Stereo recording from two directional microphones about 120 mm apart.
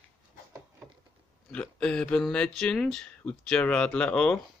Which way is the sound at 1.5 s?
10° left (ahead or behind).